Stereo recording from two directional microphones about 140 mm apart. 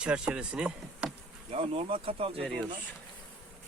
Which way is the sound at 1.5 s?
45° right (ahead or behind).